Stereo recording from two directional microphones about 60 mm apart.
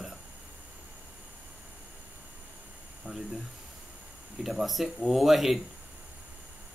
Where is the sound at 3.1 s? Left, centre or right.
Right.